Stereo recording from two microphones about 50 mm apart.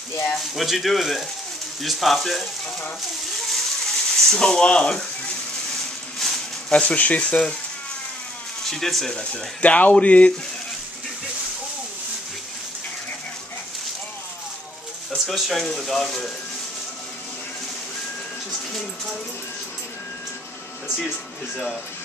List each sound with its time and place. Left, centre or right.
0.4 s speech: centre
3.3 s a sound: centre
6.1 s a sound: centre
6.7 s speech: left
8.6 s speech: centre
9.1 s speech: centre
9.6 s speech: left
15.0 s a sound: centre
15.7 s speech: centre